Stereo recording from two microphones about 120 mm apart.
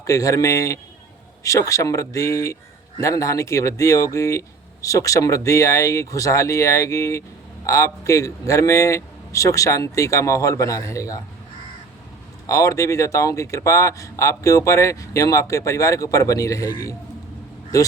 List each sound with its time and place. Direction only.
0.0 s speech: 30° left (ahead or behind)
12.5 s speech: 25° left (ahead or behind)